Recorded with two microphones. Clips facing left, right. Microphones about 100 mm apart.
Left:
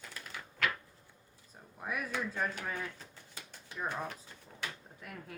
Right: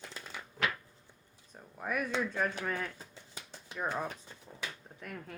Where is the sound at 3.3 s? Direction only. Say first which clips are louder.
Right 2 dB; 20° right (ahead or behind).